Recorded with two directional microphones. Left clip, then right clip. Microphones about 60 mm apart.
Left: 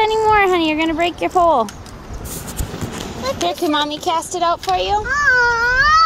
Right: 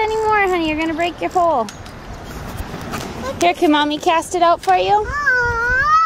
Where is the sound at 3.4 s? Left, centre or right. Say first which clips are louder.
Right 5 dB; right.